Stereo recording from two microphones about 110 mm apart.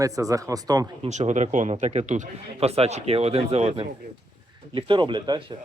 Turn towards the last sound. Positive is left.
turn(degrees=-40)  # may be behind; listen again after turning